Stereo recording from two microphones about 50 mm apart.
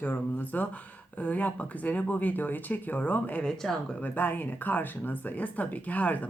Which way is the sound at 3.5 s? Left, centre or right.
Centre.